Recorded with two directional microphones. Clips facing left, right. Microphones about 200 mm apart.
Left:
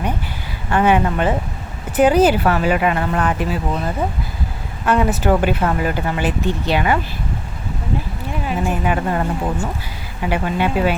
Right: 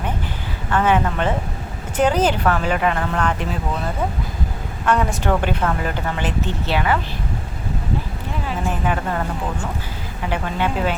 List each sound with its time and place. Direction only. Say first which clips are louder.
0.7 s speech: left 3 dB; 15° left (ahead or behind)
4.9 s speech: left 3 dB; 5° left (ahead or behind)
8.4 s a woman's voice: left 3 dB; 15° left (ahead or behind)
10.2 s speech: left 3 dB; 10° left (ahead or behind)